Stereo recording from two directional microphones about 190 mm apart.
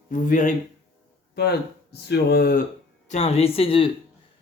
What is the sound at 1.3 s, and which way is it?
Speech, 60° left (ahead or behind).